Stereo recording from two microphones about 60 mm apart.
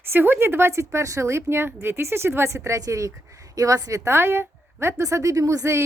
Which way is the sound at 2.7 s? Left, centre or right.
Right.